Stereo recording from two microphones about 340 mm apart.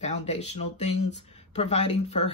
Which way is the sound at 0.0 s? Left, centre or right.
Centre.